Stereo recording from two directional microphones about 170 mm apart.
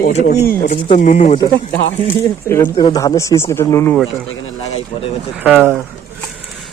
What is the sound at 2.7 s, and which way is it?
Speech, 30° left (ahead or behind).